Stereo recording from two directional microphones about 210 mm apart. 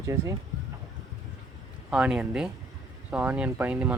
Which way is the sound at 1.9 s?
5° right (ahead or behind).